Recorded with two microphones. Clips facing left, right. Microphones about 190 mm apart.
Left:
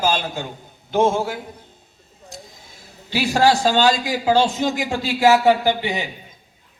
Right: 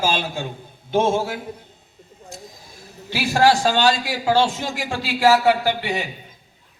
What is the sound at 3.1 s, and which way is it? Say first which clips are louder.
A man's voice: even; 15° left (ahead or behind).